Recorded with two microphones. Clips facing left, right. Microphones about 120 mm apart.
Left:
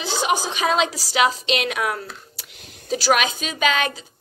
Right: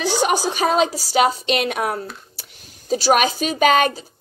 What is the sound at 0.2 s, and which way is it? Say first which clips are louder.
A woman's voice: even; 40° right (ahead or behind).